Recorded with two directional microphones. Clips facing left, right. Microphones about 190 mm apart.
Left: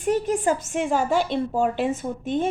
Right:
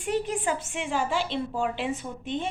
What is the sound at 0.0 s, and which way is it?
A woman's voice, 45° left (ahead or behind).